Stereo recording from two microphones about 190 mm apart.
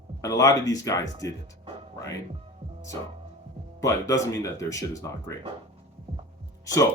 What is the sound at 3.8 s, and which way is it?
Speech, 15° left (ahead or behind).